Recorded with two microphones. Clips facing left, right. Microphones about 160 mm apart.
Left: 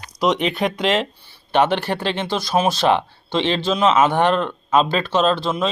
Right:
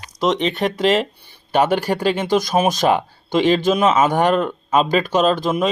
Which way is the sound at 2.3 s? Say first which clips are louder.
Right 6 dB; 50° right (ahead or behind).